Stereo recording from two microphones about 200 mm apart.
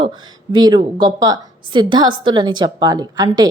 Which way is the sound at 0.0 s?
20° right (ahead or behind).